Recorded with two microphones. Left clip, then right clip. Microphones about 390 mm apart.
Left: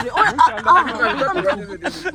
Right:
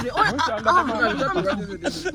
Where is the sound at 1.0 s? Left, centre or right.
Centre.